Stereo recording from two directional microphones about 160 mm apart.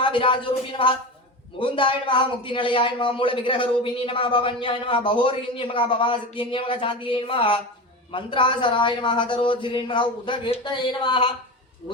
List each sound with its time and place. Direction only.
0.0 s a man's voice: 30° left (ahead or behind)